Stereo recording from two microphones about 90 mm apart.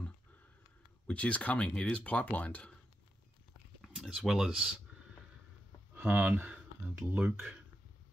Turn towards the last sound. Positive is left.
turn(degrees=-15)  # may be behind; listen again after turning